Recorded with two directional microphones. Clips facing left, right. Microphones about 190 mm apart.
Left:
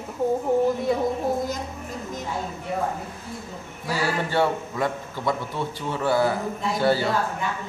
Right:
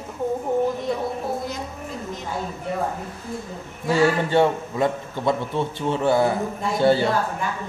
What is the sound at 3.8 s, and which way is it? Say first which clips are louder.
A man's voice: right 7 dB; 20° right (ahead or behind).